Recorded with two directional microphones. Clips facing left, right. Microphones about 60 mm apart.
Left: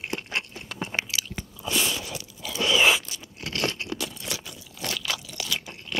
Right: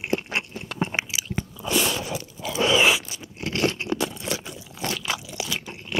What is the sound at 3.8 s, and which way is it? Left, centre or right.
Crunch, right.